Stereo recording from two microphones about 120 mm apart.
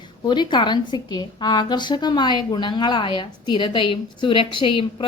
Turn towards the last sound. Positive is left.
turn(degrees=45)  # may be behind; listen again after turning